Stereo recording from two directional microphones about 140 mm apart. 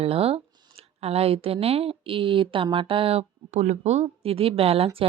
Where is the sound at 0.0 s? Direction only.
45° right (ahead or behind).